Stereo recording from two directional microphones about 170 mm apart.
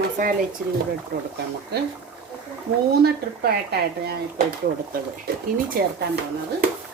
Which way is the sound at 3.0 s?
70° right (ahead or behind).